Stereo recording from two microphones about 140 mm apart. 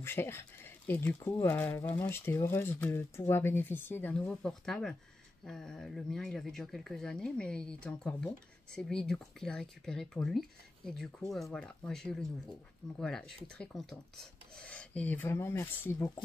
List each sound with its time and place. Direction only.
0.0 s speech: 15° left (ahead or behind)